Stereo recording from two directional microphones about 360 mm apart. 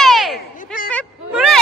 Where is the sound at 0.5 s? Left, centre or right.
Left.